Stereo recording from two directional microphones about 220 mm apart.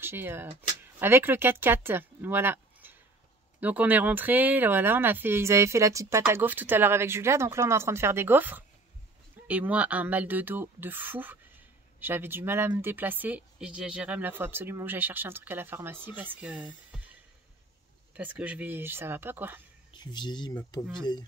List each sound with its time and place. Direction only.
0.0 s speech: 10° right (ahead or behind)
18.1 s speech: 5° right (ahead or behind)
19.9 s speech: 20° left (ahead or behind)